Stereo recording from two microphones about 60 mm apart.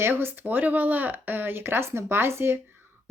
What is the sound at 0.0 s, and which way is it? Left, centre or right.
Speech, right.